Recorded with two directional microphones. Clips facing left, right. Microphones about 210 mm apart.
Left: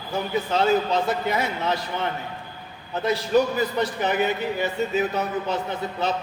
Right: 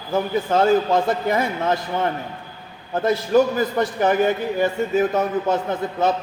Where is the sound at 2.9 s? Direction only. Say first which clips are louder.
Right 4 dB; 50° right (ahead or behind).